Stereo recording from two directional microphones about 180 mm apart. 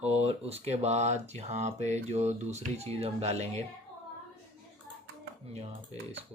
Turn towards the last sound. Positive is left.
turn(degrees=-30)  # may be behind; listen again after turning